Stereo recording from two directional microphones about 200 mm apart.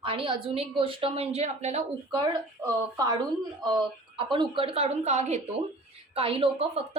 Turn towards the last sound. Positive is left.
turn(degrees=-30)  # may be behind; listen again after turning